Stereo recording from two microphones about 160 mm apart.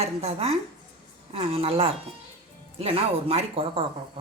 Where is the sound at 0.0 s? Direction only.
40° right (ahead or behind).